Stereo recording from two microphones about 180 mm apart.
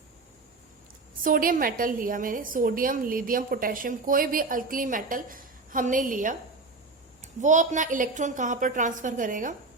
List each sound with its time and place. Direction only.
1.2 s a woman's voice: 50° right (ahead or behind)